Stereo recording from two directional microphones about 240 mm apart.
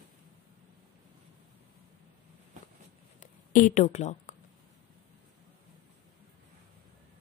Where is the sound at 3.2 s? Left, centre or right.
Left.